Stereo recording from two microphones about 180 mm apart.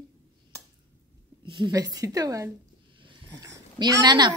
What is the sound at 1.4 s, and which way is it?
A woman's voice, 25° right (ahead or behind).